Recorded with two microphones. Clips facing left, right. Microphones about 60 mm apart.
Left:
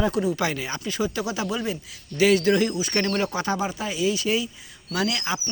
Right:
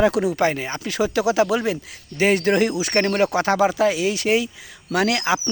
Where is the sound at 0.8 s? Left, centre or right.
Right.